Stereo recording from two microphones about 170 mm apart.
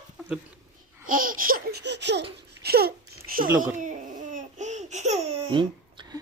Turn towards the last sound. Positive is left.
turn(degrees=-30)  # may be behind; listen again after turning